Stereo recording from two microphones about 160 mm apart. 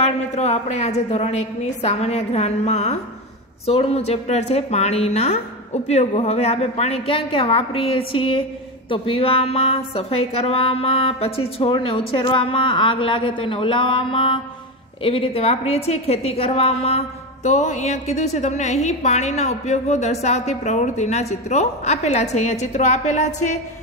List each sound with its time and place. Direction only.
0.0 s a woman's voice: 45° left (ahead or behind)